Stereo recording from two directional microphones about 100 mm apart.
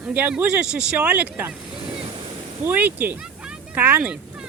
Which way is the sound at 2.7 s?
15° right (ahead or behind).